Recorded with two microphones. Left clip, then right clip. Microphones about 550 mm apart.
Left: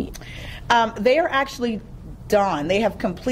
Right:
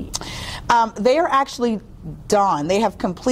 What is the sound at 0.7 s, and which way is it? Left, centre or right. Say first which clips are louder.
A woman's voice: right 1 dB; right.